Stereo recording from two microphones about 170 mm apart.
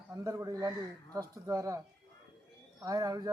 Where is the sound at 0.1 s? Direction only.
20° right (ahead or behind).